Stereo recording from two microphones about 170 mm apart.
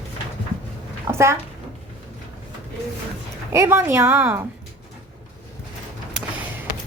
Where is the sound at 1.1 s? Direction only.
15° right (ahead or behind).